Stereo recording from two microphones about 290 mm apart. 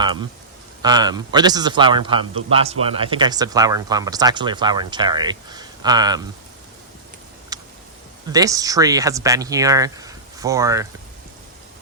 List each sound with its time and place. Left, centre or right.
0.0 s a man's voice: centre
7.5 s a sound: centre
8.3 s speech: centre